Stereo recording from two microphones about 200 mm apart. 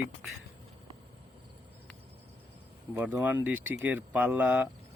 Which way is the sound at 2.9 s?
10° right (ahead or behind).